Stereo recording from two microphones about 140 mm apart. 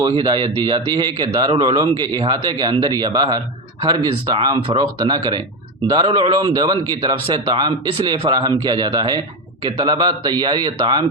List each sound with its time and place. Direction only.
0.2 s a man's voice: 35° right (ahead or behind)